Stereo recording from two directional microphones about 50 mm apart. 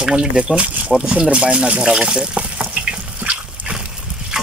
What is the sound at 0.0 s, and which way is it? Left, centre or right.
Speech, centre.